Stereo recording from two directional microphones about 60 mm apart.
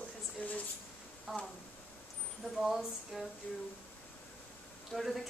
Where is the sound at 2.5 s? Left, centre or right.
Centre.